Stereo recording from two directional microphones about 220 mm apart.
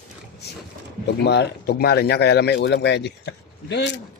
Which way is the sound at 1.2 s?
50° left (ahead or behind).